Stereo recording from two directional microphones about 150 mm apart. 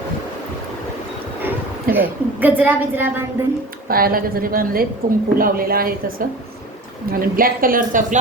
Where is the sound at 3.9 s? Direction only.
80° right.